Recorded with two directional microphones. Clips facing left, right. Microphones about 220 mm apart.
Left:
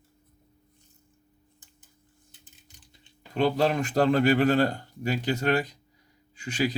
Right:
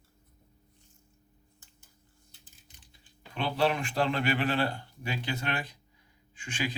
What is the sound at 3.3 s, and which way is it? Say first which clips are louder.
Speech: left 5 dB; 40° left (ahead or behind).